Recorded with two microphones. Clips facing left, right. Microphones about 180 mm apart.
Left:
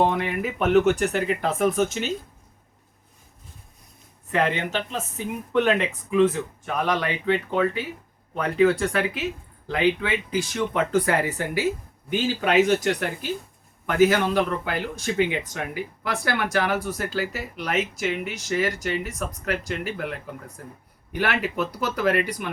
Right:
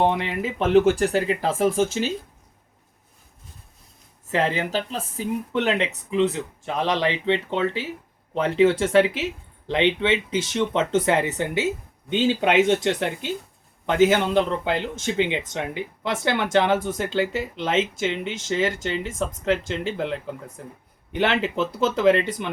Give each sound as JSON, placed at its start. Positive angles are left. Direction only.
{"t": 0.0, "sound": "speech", "side_deg": -25}
{"t": 4.3, "sound": "speech", "side_deg": -30}